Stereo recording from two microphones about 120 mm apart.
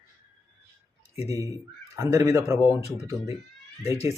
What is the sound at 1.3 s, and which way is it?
Speech, 25° right (ahead or behind).